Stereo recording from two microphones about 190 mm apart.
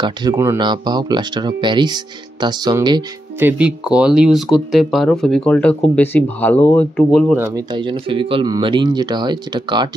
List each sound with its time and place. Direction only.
0.0 s speech: 20° right (ahead or behind)
3.3 s speech: 10° right (ahead or behind); by 7.3 s 5° left (ahead or behind)
7.3 s speech: 10° right (ahead or behind)
7.7 s speech: 25° right (ahead or behind)